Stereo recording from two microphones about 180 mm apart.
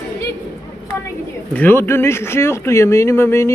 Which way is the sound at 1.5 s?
10° left (ahead or behind).